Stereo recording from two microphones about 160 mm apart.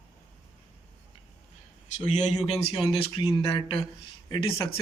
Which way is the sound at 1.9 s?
45° left (ahead or behind).